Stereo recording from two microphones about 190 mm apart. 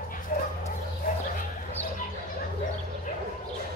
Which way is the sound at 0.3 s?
45° left (ahead or behind).